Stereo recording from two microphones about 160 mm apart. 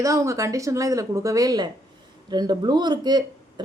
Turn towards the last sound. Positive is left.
turn(degrees=-25)  # may be behind; listen again after turning